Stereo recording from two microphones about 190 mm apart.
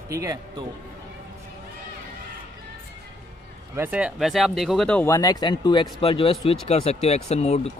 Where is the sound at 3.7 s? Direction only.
10° right (ahead or behind).